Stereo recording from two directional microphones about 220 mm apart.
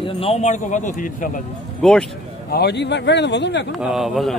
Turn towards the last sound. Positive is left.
turn(degrees=0)  # may be behind; listen again after turning